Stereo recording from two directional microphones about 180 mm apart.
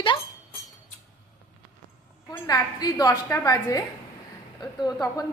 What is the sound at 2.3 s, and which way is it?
A woman's voice, 20° left (ahead or behind).